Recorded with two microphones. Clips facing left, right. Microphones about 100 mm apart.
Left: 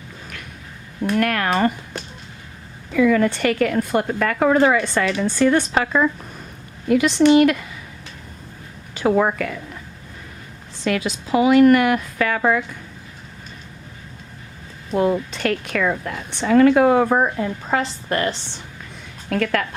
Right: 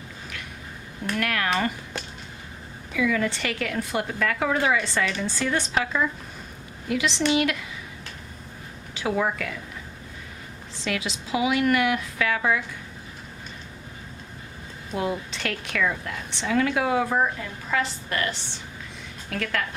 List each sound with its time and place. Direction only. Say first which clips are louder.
1.2 s a woman's voice: left 5 dB; 45° left (ahead or behind)
2.9 s a woman's voice: left 8 dB; 50° left (ahead or behind)
9.0 s a woman's voice: left 7 dB; 50° left (ahead or behind)
10.8 s a woman's voice: left 7 dB; 50° left (ahead or behind)
14.9 s a woman's voice: left 9 dB; 50° left (ahead or behind)
17.3 s a woman's voice: left 6 dB; 40° left (ahead or behind)
19.3 s a woman's voice: left 8 dB; 60° left (ahead or behind)